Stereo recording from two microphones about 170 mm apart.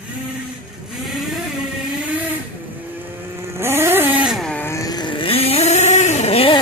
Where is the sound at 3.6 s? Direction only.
15° right (ahead or behind).